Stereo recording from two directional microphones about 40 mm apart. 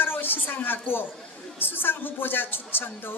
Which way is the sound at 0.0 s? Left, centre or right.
Left.